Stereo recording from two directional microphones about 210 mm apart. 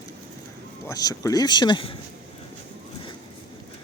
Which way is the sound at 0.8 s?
15° left (ahead or behind).